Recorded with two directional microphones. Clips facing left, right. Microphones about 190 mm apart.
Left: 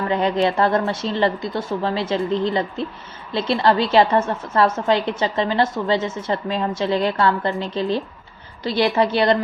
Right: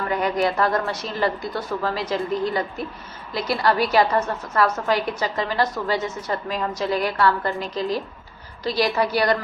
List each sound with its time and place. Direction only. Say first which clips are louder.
0.1 s a woman's voice: left 3 dB; 25° left (ahead or behind)